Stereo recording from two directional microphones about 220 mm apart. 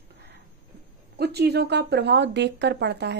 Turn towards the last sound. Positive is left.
turn(degrees=-50)  # may be behind; listen again after turning